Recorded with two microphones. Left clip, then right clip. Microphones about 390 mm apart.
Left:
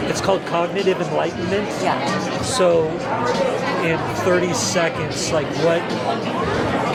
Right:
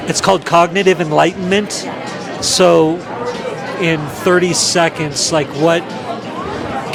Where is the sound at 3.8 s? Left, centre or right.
Right.